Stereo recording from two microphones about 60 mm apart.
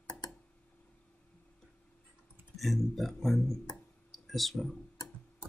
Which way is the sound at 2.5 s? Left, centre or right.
Centre.